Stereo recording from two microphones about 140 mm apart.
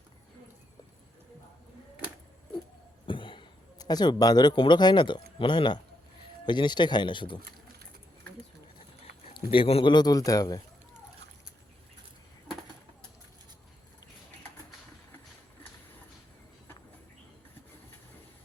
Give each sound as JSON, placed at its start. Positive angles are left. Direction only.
{"t": 3.1, "sound": "speech", "side_deg": 35}
{"t": 9.3, "sound": "speech", "side_deg": 40}
{"t": 9.9, "sound": "speech", "side_deg": 30}